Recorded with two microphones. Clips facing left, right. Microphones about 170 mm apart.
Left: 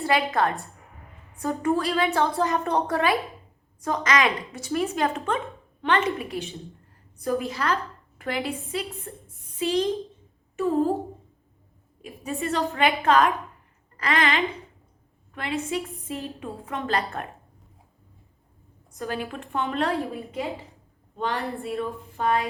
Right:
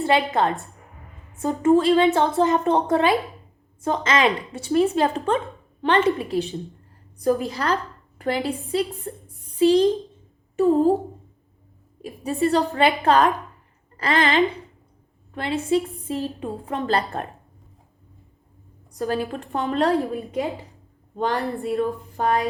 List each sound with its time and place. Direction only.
0.0 s a woman's voice: 25° right (ahead or behind)
12.0 s a woman's voice: 35° right (ahead or behind)
18.9 s a woman's voice: 35° right (ahead or behind)